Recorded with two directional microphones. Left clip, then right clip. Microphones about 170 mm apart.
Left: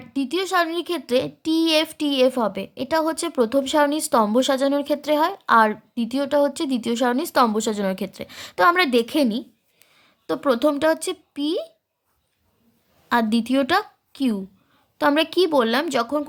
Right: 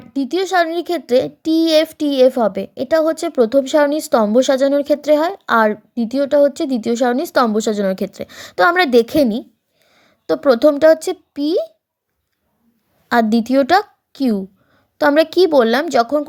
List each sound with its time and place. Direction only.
0.0 s a child's voice: 15° right (ahead or behind)
13.1 s a woman's voice: 20° right (ahead or behind)